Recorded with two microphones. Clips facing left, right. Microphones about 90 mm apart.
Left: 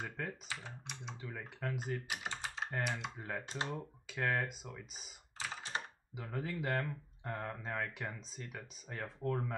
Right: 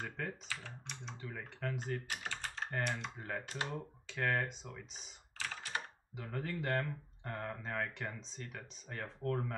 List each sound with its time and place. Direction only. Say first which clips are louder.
0.2 s speech: even; 5° left (ahead or behind)
2.2 s typing: left 1 dB; 15° left (ahead or behind)
2.5 s speech: right 1 dB; 5° left (ahead or behind)
5.5 s computer keyboard: even; 25° left (ahead or behind)
5.8 s speech: left 1 dB; 5° left (ahead or behind)